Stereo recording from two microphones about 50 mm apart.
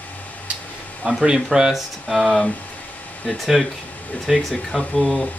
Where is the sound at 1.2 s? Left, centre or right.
Centre.